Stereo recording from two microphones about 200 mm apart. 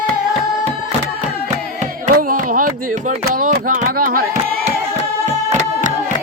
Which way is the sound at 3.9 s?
45° right (ahead or behind).